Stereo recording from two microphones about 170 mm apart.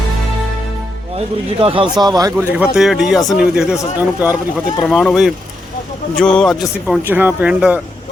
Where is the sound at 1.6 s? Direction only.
30° right (ahead or behind).